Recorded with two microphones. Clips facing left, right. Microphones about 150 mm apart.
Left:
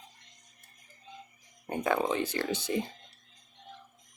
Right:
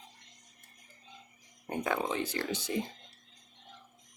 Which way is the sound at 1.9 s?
65° left (ahead or behind).